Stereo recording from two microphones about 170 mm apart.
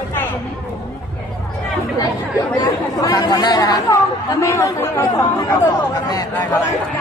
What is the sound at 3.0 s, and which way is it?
Speech, 20° left (ahead or behind).